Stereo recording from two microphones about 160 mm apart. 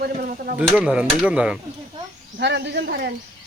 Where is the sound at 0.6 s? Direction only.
5° right (ahead or behind).